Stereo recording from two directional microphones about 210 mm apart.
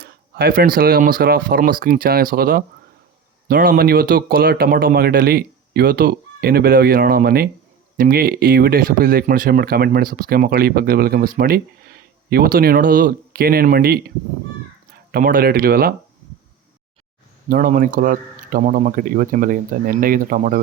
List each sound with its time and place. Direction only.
0.0 s speech: 45° right (ahead or behind)
15.1 s speech: 45° right (ahead or behind)
17.5 s speech: 40° right (ahead or behind)